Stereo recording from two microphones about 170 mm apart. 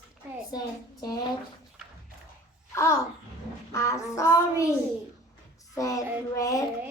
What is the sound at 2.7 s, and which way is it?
Babbling, 15° left (ahead or behind).